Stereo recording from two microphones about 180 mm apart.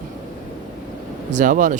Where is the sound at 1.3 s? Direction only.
45° right (ahead or behind).